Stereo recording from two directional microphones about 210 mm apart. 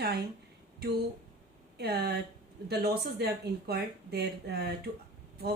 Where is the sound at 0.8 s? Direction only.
50° right (ahead or behind).